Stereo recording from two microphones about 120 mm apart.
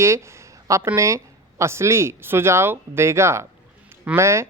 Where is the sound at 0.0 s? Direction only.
25° right (ahead or behind).